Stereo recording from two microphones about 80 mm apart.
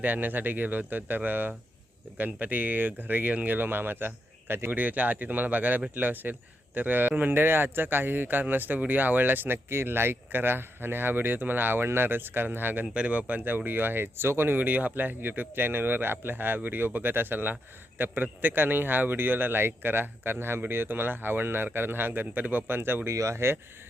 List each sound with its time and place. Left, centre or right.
0.0 s speech: right